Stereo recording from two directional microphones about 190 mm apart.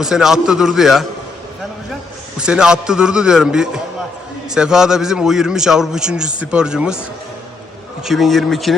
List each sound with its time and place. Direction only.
0.0 s a man's voice: centre (ahead or behind)
2.4 s a man's voice: 5° right (ahead or behind)
8.0 s a man's voice: centre (ahead or behind)